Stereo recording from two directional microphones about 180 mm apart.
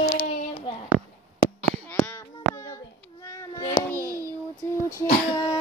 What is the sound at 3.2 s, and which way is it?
Cat, 20° left (ahead or behind).